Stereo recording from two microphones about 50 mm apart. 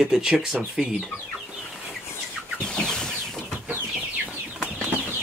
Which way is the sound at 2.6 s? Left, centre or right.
Centre.